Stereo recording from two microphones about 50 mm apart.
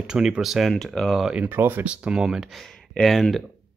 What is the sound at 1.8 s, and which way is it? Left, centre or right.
Speech, centre.